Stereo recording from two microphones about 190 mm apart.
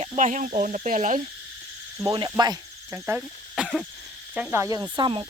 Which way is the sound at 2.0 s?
25° right (ahead or behind).